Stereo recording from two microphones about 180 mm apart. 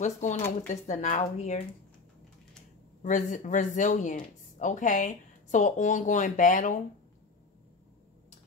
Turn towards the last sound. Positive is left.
turn(degrees=45)  # may be behind; listen again after turning